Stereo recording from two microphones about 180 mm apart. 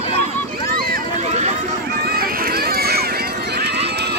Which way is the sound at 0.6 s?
55° right (ahead or behind).